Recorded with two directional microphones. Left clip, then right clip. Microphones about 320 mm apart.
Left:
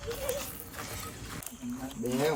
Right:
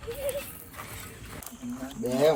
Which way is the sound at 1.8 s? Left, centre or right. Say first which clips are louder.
Right 6 dB; centre.